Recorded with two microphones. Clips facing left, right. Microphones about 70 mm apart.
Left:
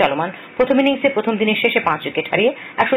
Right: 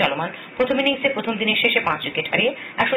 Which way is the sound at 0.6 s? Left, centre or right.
Centre.